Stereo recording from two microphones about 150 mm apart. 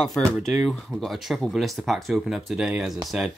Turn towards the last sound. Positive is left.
turn(degrees=-5)  # may be behind; listen again after turning